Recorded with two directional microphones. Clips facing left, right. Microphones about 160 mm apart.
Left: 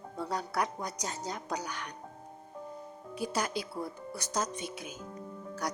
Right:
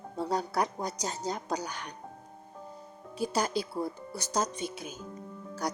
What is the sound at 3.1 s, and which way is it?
A woman's voice, 30° right (ahead or behind).